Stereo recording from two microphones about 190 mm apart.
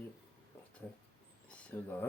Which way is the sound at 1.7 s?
10° left (ahead or behind).